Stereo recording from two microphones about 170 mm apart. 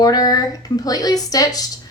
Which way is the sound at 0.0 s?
20° left (ahead or behind).